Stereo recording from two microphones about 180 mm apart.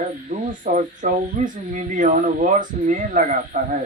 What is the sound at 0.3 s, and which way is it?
Speech, 45° right (ahead or behind).